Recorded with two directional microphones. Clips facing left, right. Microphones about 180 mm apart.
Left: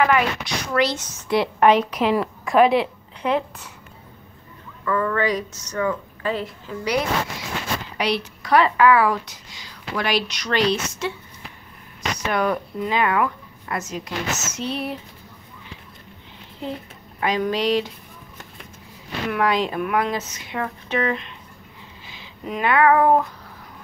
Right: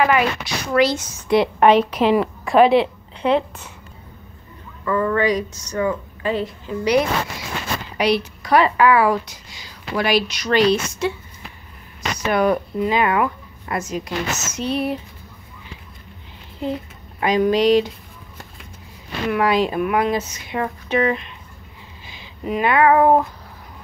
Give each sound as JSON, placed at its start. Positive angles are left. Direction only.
{"t": 0.0, "sound": "a woman's voice", "side_deg": -10}
{"t": 1.3, "sound": "a woman's voice", "side_deg": -20}
{"t": 4.8, "sound": "a woman's voice", "side_deg": -20}
{"t": 17.2, "sound": "a woman's voice", "side_deg": -15}
{"t": 19.3, "sound": "a woman's voice", "side_deg": -10}